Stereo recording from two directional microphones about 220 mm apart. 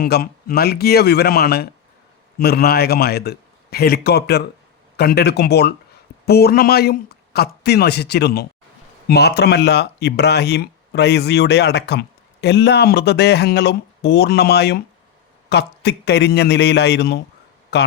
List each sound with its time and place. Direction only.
0.0 s speech: 45° left (ahead or behind)